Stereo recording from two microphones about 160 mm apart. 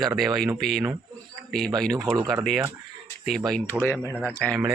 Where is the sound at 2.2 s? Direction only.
25° right (ahead or behind).